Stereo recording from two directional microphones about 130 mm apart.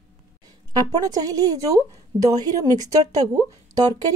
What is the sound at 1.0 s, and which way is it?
Speech, 30° right (ahead or behind).